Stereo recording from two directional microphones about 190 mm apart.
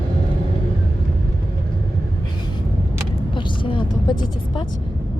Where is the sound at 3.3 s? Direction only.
25° left (ahead or behind).